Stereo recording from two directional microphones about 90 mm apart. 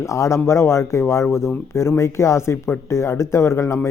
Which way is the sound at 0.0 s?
35° left (ahead or behind).